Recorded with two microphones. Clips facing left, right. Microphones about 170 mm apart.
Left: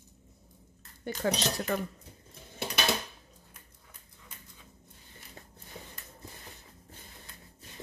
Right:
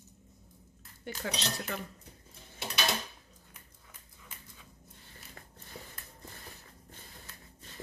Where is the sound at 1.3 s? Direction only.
50° left (ahead or behind).